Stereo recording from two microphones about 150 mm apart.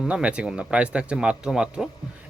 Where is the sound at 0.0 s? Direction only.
5° right (ahead or behind).